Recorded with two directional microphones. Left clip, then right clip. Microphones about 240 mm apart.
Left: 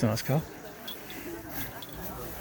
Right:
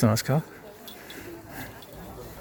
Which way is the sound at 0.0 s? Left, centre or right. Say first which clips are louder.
Right 4 dB; right.